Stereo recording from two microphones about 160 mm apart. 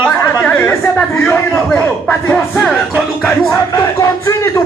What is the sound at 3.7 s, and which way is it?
Speech, 20° left (ahead or behind).